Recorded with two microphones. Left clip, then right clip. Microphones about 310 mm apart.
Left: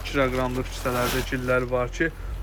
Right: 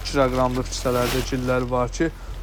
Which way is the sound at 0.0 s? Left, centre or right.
Centre.